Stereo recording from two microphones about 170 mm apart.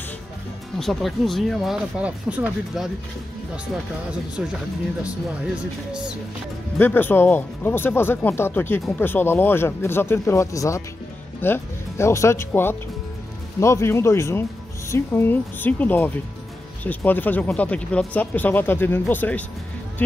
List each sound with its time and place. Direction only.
0.7 s speech: centre (ahead or behind)
4.4 s speech: 5° right (ahead or behind)
6.8 s speech: 10° left (ahead or behind)